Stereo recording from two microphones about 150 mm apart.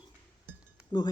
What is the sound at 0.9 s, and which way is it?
Speech, 30° left (ahead or behind).